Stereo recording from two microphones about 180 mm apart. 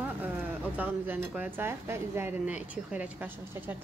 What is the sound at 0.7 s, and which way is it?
Speech, 10° right (ahead or behind).